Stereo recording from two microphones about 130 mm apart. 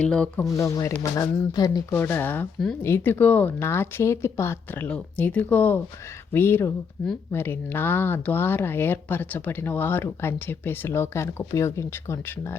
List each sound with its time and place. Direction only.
0.0 s speech: 5° left (ahead or behind)
0.5 s speech: 25° left (ahead or behind)
1.9 s speech: 15° left (ahead or behind)